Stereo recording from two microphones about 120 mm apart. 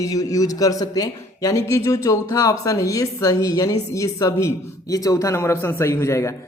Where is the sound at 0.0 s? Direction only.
30° left (ahead or behind).